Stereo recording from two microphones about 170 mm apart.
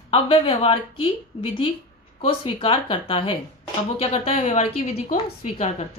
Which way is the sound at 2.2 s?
30° left (ahead or behind).